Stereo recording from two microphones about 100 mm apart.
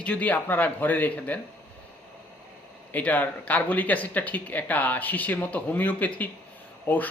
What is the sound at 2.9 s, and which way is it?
Speech, 15° left (ahead or behind).